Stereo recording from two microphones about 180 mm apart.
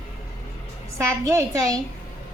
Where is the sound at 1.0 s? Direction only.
15° right (ahead or behind).